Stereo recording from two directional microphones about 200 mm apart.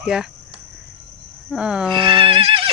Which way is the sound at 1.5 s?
5° right (ahead or behind).